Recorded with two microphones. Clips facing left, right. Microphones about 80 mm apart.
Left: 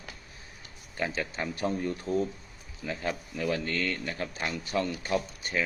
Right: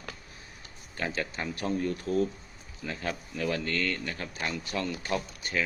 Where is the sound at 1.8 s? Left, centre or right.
Left.